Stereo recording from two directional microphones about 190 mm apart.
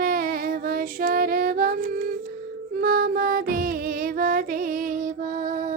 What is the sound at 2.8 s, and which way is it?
Music, 55° right (ahead or behind).